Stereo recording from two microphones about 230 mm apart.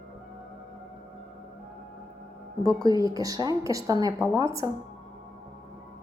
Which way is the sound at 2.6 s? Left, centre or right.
Centre.